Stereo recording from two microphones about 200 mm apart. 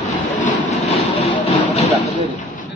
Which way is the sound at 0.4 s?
30° left (ahead or behind).